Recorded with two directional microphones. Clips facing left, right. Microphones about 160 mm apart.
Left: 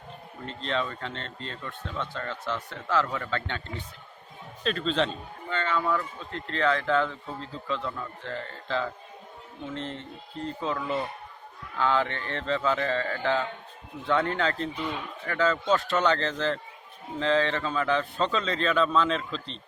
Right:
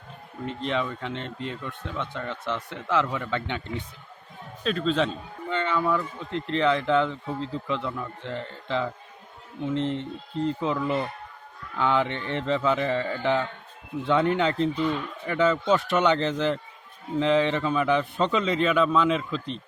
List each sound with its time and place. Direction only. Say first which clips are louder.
0.4 s speech: right 3 dB; 15° right (ahead or behind)
4.6 s speech: right 2 dB; 5° right (ahead or behind)
5.5 s speech: right 2 dB; 20° right (ahead or behind)
11.8 s speech: right 2 dB; 20° right (ahead or behind)